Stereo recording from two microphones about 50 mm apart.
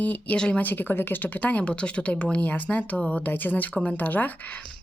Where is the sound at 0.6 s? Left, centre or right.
Left.